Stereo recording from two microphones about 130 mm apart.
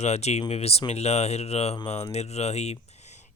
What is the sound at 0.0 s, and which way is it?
Speech, 55° left (ahead or behind).